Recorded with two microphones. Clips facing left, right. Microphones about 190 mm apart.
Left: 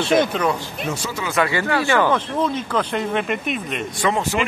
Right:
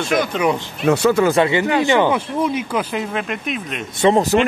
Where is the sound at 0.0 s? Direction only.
30° left (ahead or behind).